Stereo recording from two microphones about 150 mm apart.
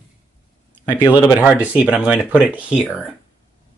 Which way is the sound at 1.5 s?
10° right (ahead or behind).